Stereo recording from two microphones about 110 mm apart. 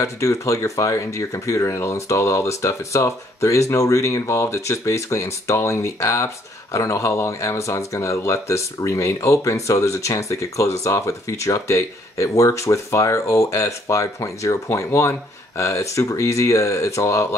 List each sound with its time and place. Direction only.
0.0 s speech: 25° left (ahead or behind)